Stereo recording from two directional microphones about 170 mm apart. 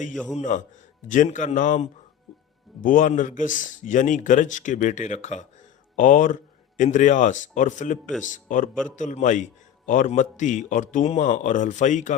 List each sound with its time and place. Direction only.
0.3 s a man's voice: 45° left (ahead or behind)